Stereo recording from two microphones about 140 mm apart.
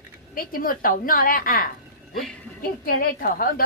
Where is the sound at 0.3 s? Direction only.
90° left.